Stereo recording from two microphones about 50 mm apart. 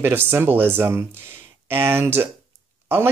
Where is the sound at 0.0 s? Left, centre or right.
Right.